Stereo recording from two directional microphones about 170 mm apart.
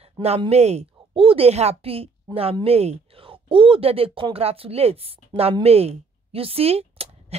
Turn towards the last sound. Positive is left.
turn(degrees=-35)  # may be behind; listen again after turning